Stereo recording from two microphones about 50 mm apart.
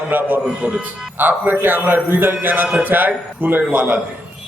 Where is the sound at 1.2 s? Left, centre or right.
Right.